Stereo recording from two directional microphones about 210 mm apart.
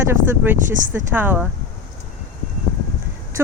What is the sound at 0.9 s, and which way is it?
Speech, 10° right (ahead or behind).